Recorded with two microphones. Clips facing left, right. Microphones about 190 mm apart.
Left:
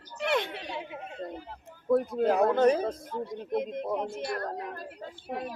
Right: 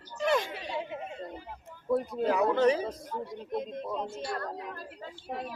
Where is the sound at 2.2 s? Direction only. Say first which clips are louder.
Left 1 dB; 50° left (ahead or behind).